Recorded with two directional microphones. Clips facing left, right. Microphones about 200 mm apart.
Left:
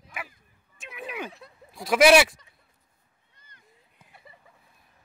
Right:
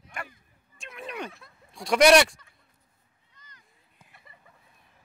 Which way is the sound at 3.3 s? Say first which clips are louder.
Right 2 dB; 55° left (ahead or behind).